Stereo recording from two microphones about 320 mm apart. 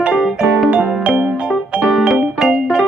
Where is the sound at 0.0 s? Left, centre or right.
Centre.